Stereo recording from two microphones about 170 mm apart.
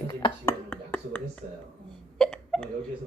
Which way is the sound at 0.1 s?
25° left (ahead or behind).